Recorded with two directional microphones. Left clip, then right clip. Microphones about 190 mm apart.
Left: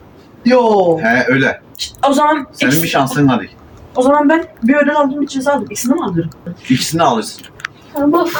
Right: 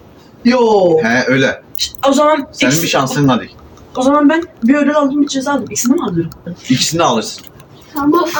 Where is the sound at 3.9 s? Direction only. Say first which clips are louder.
Left 1 dB; 40° left (ahead or behind).